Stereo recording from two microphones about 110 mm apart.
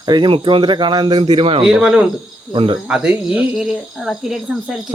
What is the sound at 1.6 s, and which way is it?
Speech, 10° right (ahead or behind).